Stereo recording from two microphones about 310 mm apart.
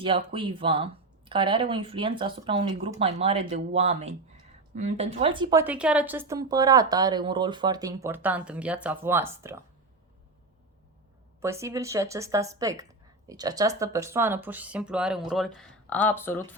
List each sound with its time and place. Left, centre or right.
0.3 s speech: centre
11.3 s speech: centre